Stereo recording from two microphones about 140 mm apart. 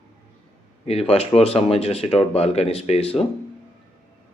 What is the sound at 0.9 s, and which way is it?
Speech, 45° left (ahead or behind).